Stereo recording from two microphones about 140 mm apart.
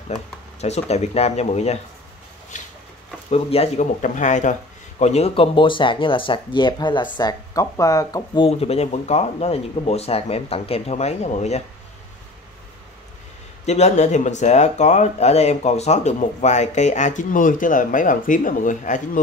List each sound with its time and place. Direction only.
0.1 s speech: 50° left (ahead or behind)
2.5 s a sound: 65° left (ahead or behind)
3.3 s speech: 45° left (ahead or behind); by 8.5 s 25° left (ahead or behind)
8.5 s speech: 45° left (ahead or behind)
13.7 s speech: 50° left (ahead or behind); by 18.9 s 70° left (ahead or behind)